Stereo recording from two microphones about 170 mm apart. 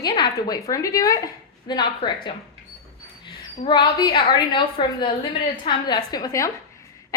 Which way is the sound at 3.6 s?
25° left (ahead or behind).